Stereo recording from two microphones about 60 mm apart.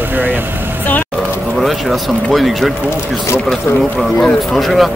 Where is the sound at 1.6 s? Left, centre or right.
Centre.